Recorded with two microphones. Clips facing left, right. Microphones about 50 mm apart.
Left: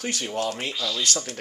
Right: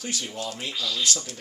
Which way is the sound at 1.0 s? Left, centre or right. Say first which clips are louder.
Left 1 dB; left.